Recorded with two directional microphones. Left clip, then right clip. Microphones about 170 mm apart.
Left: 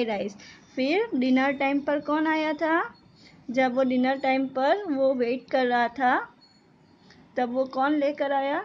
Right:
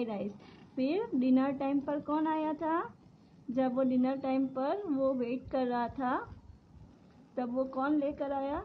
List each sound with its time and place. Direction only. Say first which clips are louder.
0.0 s a woman's voice: left 9 dB; 15° left (ahead or behind)
7.3 s a woman's voice: left 8 dB; 20° left (ahead or behind)